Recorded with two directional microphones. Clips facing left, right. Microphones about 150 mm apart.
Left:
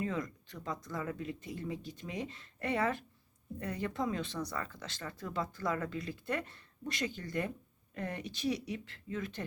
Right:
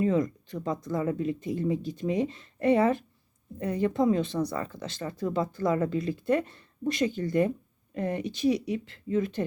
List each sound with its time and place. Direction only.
0.0 s speech: 25° right (ahead or behind)